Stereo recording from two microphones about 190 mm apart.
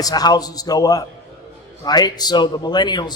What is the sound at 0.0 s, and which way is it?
A man's voice, 20° left (ahead or behind).